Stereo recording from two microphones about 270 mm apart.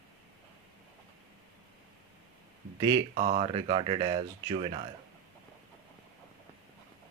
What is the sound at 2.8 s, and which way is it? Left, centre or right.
Speech, centre.